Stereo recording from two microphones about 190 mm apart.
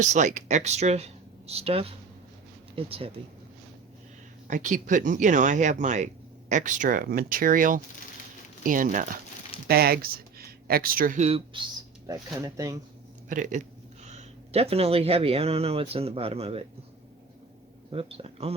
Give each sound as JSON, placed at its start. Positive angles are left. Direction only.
{"t": 0.0, "sound": "speech", "side_deg": -40}
{"t": 4.4, "sound": "speech", "side_deg": -40}
{"t": 12.0, "sound": "speech", "side_deg": -20}
{"t": 13.2, "sound": "speech", "side_deg": -45}
{"t": 17.9, "sound": "speech", "side_deg": -30}